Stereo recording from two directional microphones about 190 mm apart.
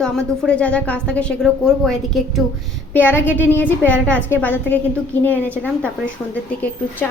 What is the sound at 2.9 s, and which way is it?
A woman's voice, 10° left (ahead or behind).